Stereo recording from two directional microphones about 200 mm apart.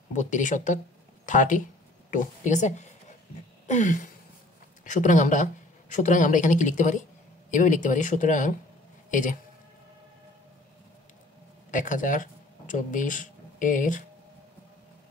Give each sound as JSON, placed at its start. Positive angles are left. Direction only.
{"t": 0.1, "sound": "speech", "side_deg": 40}
{"t": 3.6, "sound": "a sound", "side_deg": 35}
{"t": 4.8, "sound": "speech", "side_deg": 40}
{"t": 11.7, "sound": "speech", "side_deg": 40}